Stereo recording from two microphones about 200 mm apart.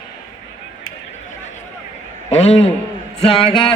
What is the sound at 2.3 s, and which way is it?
Speech, 35° left (ahead or behind).